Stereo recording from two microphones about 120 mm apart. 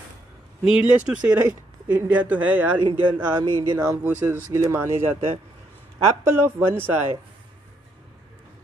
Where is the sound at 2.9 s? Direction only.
40° right (ahead or behind).